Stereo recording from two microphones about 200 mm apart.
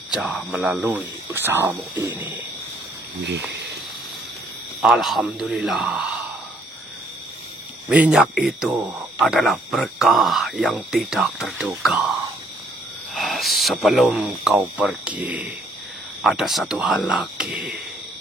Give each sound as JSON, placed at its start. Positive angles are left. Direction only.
{"t": 0.1, "sound": "speech", "side_deg": -5}
{"t": 3.2, "sound": "speech", "side_deg": -60}
{"t": 4.8, "sound": "speech", "side_deg": 0}
{"t": 7.9, "sound": "speech", "side_deg": -5}